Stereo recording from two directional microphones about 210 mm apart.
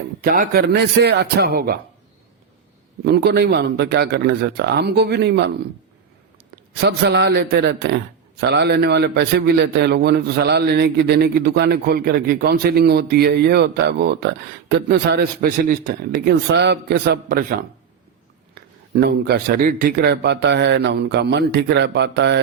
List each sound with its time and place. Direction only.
0.2 s a man's voice: 45° right (ahead or behind)
3.0 s a man's voice: 50° right (ahead or behind)
6.7 s a man's voice: 50° right (ahead or behind)
18.9 s a man's voice: 50° right (ahead or behind)